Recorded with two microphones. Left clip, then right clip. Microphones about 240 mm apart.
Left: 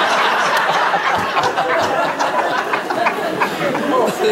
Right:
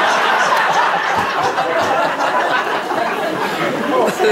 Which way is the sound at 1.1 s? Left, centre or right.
Centre.